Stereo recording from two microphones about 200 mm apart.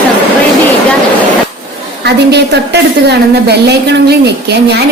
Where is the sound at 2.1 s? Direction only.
55° right (ahead or behind).